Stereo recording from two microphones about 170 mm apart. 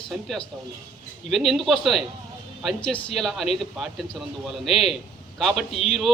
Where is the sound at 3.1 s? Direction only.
Centre (ahead or behind).